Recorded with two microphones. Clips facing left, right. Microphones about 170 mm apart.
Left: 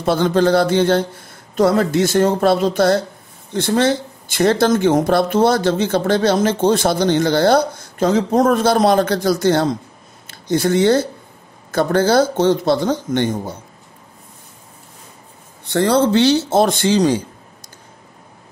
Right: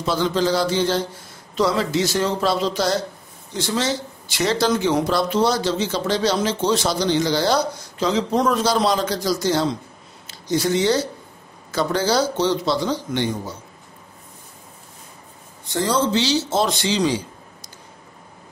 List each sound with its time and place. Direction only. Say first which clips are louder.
0.0 s speech: left 5 dB; 55° left (ahead or behind)
15.6 s speech: left 6 dB; 65° left (ahead or behind)